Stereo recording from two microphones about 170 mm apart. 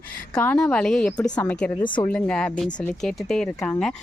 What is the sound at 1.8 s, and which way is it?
Speech, 30° left (ahead or behind).